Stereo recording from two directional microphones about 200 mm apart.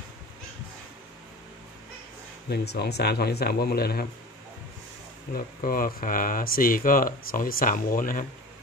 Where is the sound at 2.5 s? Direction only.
55° left (ahead or behind).